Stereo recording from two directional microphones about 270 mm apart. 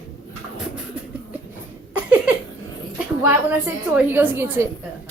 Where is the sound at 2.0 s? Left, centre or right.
Centre.